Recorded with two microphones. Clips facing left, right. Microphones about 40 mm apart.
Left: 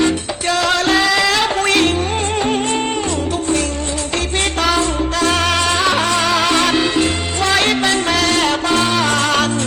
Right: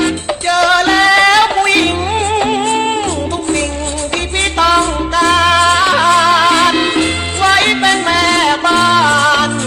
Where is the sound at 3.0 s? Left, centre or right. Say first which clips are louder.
Right 2 dB; right.